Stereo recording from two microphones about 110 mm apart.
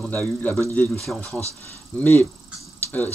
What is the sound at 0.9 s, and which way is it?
Speech, centre (ahead or behind).